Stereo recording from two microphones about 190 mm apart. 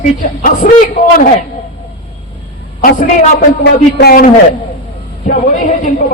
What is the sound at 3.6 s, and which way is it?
Speech, 55° left (ahead or behind).